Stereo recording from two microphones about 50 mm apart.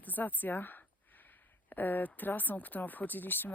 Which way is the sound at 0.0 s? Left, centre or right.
Left.